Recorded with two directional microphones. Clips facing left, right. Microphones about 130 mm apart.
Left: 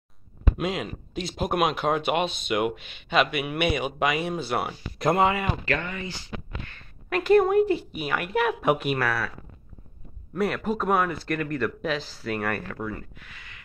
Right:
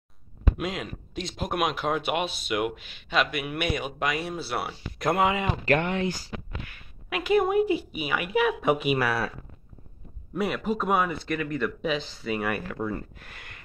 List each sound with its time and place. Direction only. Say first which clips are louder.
0.6 s speech: left 7 dB; centre (ahead or behind)
5.2 s speech: even; 20° right (ahead or behind)
5.8 s speech: right 6 dB; 70° right (ahead or behind)
6.0 s speech: right 7 dB; 40° right (ahead or behind)
6.6 s speech: left 1 dB; 10° right (ahead or behind)
10.3 s speech: left 1 dB; 5° right (ahead or behind)
13.2 s a sound: right 1 dB; 50° right (ahead or behind)